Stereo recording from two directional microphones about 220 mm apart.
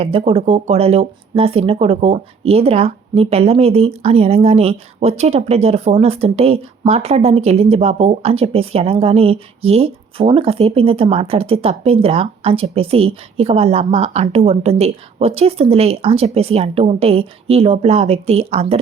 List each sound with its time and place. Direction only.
0.0 s speech: 25° right (ahead or behind)